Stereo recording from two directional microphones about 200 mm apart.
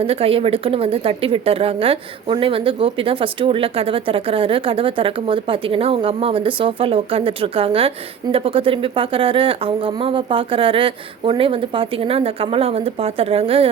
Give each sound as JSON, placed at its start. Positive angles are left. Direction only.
{"t": 0.0, "sound": "speech", "side_deg": -30}